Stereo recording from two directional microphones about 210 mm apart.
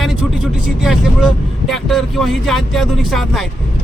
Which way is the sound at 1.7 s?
Centre (ahead or behind).